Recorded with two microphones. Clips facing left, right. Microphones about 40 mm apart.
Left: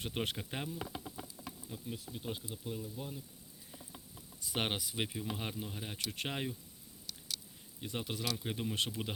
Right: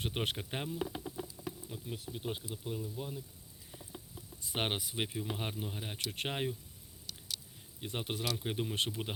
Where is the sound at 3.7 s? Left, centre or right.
Centre.